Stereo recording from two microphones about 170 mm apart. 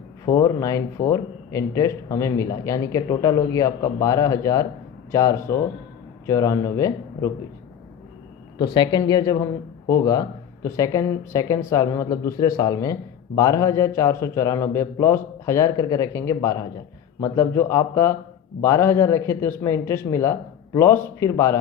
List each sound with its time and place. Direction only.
0.3 s speech: 20° left (ahead or behind)
8.5 s speech: 25° left (ahead or behind)